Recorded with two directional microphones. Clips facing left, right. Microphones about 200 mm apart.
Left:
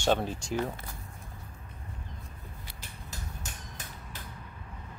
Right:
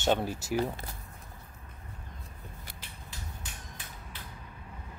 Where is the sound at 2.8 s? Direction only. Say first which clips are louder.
Left 2 dB; 45° left (ahead or behind).